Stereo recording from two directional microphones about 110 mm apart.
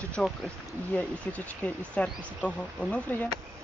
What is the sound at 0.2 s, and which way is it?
Speech, centre (ahead or behind).